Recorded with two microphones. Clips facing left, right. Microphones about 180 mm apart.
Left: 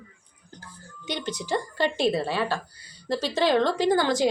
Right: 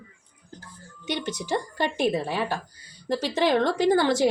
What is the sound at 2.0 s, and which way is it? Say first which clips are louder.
A woman's voice: right 1 dB; 15° right (ahead or behind).